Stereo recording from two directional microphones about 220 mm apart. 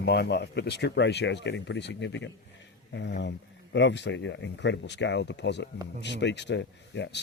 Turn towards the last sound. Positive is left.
turn(degrees=55)  # may be behind; listen again after turning